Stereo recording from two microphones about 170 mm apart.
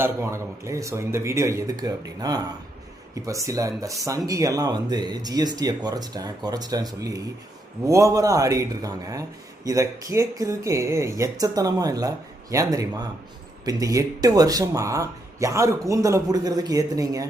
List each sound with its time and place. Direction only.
0.0 s speech: 15° right (ahead or behind)